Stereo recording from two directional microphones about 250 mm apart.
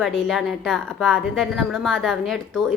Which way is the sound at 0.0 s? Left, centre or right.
Centre.